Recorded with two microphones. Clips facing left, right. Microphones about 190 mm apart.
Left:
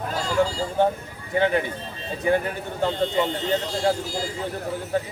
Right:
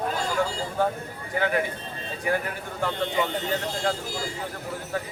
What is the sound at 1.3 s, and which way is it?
Speech, 25° left (ahead or behind).